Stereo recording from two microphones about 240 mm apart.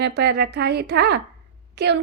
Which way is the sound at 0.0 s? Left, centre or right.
Right.